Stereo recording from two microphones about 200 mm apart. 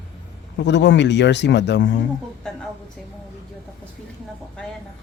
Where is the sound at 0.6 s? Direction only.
60° left (ahead or behind).